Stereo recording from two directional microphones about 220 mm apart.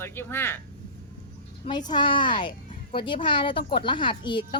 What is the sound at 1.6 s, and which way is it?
A woman's voice, 20° left (ahead or behind).